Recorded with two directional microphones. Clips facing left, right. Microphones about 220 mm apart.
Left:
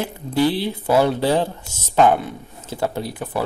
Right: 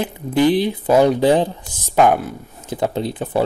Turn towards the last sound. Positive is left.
turn(degrees=-25)  # may be behind; listen again after turning